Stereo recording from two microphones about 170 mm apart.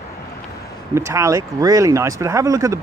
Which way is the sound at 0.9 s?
15° right (ahead or behind).